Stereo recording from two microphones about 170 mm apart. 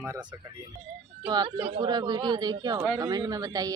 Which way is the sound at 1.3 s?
25° right (ahead or behind).